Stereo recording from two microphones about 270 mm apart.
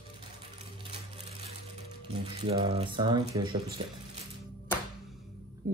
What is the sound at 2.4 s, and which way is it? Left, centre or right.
Speech, right.